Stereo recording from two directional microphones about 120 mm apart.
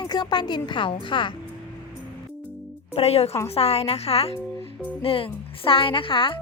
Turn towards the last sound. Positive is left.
turn(degrees=45)  # may be behind; listen again after turning